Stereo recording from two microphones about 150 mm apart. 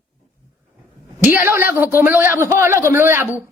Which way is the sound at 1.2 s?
15° right (ahead or behind).